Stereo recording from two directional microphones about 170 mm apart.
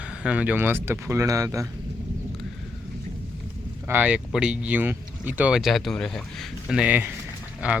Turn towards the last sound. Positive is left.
turn(degrees=-5)  # may be behind; listen again after turning